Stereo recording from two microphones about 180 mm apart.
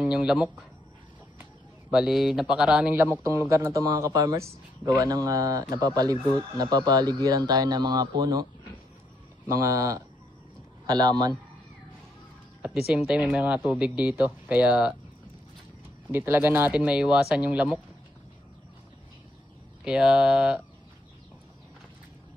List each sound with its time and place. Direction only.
0.0 s a man's voice: 5° right (ahead or behind); by 8.5 s 20° right (ahead or behind)
9.5 s a man's voice: 15° right (ahead or behind)
12.6 s a man's voice: 5° right (ahead or behind)
16.1 s a man's voice: 10° right (ahead or behind)
19.8 s speech: 5° right (ahead or behind)